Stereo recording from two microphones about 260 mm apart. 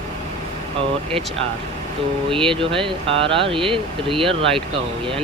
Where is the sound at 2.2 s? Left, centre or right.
Centre.